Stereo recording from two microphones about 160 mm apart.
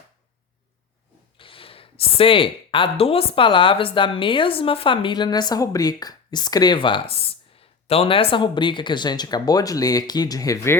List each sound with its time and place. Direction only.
1.4 s speech: 35° left (ahead or behind); by 10.8 s 20° left (ahead or behind)